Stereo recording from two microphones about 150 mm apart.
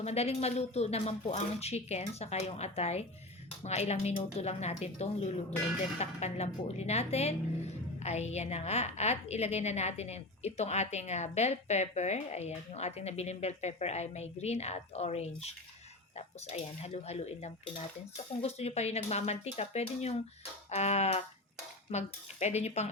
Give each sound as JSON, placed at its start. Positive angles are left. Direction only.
{"t": 0.0, "sound": "a woman's voice", "side_deg": 45}